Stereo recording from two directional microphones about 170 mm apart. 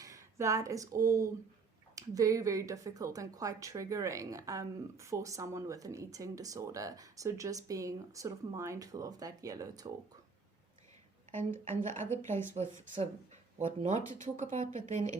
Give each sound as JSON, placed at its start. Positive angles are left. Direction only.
{"t": 0.0, "sound": "speech", "side_deg": -20}
{"t": 11.3, "sound": "a woman's voice", "side_deg": 15}
{"t": 12.9, "sound": "speech", "side_deg": -35}